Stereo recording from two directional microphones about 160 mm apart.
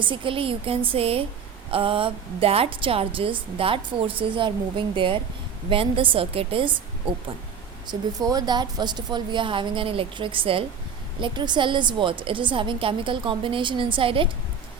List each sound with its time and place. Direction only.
0.0 s a woman's voice: 30° right (ahead or behind)
7.9 s a woman's voice: 25° right (ahead or behind)